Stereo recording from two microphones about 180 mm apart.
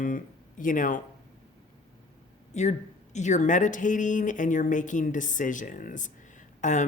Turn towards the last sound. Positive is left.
turn(degrees=45)  # may be behind; listen again after turning